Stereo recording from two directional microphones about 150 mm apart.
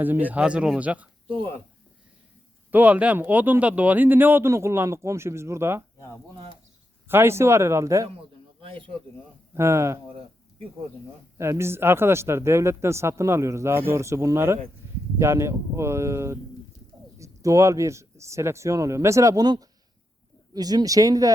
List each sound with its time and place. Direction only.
0.0 s speech: 10° right (ahead or behind)
2.7 s speech: 10° right (ahead or behind)
7.1 s speech: 15° right (ahead or behind)
8.6 s speech: 35° right (ahead or behind)
9.6 s speech: 20° right (ahead or behind)
11.3 s speech: 20° right (ahead or behind)